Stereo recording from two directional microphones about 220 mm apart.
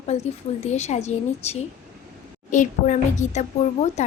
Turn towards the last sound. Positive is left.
turn(degrees=30)  # may be behind; listen again after turning